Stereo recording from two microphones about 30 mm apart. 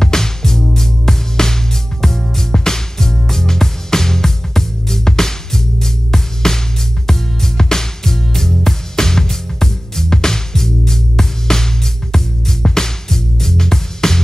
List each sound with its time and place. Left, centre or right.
0.0 s music: centre